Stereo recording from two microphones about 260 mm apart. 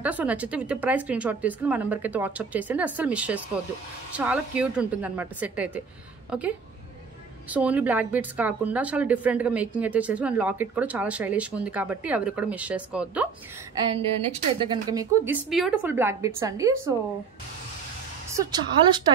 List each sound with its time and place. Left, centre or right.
0.0 s a woman's voice: centre
7.5 s a woman's voice: centre
14.6 s a woman's voice: centre
15.5 s a woman's voice: centre
18.3 s a woman's voice: centre